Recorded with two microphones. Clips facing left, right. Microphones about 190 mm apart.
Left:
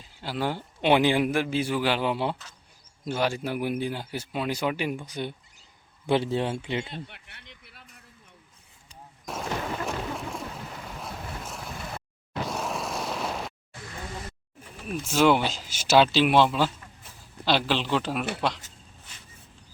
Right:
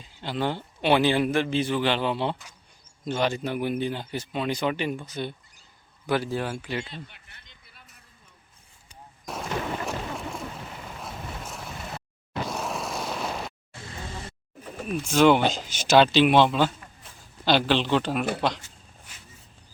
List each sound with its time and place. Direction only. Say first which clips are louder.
0.2 s speech: right 1 dB; 5° left (ahead or behind)
6.1 s speech: left 2 dB; 25° left (ahead or behind)
6.8 s speech: left 3 dB; 60° left (ahead or behind)
9.8 s a sound: even; centre (ahead or behind)
10.8 s vehicle: right 1 dB; centre (ahead or behind)
14.8 s speech: right 2 dB; centre (ahead or behind)